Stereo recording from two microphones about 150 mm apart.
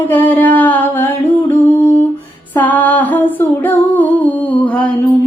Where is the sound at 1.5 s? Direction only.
15° left (ahead or behind).